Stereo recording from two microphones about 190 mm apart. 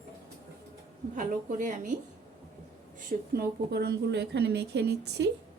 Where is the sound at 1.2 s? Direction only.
45° right (ahead or behind).